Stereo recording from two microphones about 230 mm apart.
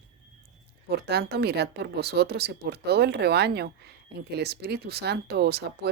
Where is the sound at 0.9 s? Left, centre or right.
Right.